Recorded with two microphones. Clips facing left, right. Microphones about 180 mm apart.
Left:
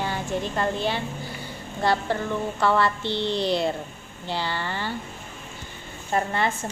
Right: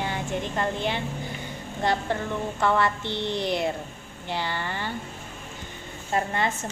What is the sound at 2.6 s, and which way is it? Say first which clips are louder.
A woman's voice: left 1 dB; 20° right (ahead or behind).